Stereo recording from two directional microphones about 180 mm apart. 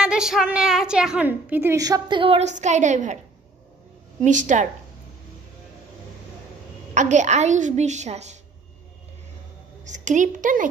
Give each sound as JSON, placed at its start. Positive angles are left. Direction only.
{"t": 0.0, "sound": "a woman's voice", "side_deg": -5}
{"t": 4.2, "sound": "a woman's voice", "side_deg": -45}
{"t": 6.9, "sound": "a woman's voice", "side_deg": -40}
{"t": 9.8, "sound": "a woman's voice", "side_deg": -45}